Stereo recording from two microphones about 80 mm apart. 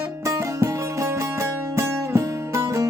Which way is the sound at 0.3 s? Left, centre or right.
Right.